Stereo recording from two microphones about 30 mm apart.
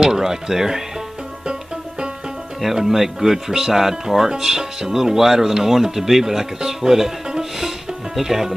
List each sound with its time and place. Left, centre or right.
0.0 s speech: centre
1.4 s music: right
2.6 s speech: centre